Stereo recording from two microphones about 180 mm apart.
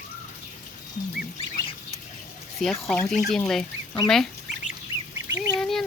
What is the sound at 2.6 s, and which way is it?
Speech, centre (ahead or behind).